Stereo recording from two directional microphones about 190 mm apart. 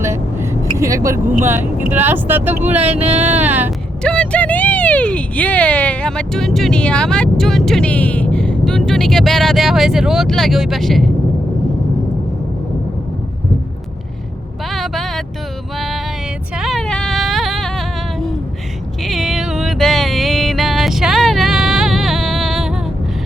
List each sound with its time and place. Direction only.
0.0 s vehicle: 15° right (ahead or behind)
1.5 s speech: 10° right (ahead or behind)
2.7 s speech: 35° right (ahead or behind)
3.3 s speech: 10° right (ahead or behind)
4.0 s speech: 5° left (ahead or behind)
14.7 s vehicle: centre (ahead or behind)
16.6 s music: centre (ahead or behind)